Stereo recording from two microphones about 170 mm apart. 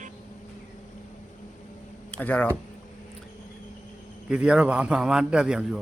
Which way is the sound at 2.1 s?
10° left (ahead or behind).